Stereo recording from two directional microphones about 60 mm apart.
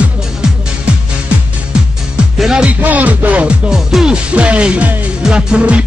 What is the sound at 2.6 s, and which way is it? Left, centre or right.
Speech, right.